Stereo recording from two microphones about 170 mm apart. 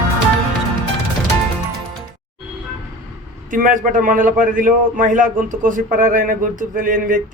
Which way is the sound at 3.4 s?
55° right (ahead or behind).